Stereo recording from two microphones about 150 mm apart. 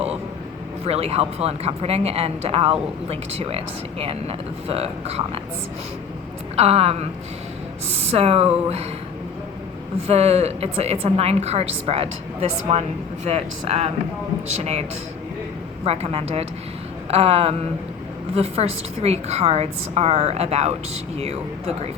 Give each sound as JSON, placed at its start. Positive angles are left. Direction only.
{"t": 0.9, "sound": "speech", "side_deg": -45}
{"t": 6.6, "sound": "speech", "side_deg": -45}
{"t": 10.1, "sound": "speech", "side_deg": -45}
{"t": 17.1, "sound": "a sound", "side_deg": -40}
{"t": 18.3, "sound": "speech", "side_deg": -45}